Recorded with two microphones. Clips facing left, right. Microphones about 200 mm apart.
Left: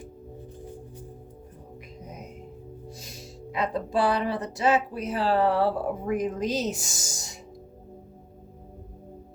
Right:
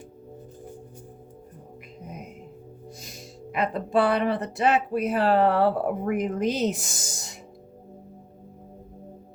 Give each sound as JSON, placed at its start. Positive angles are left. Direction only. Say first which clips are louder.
{"t": 3.5, "sound": "speech", "louder": "right 3 dB", "side_deg": -55}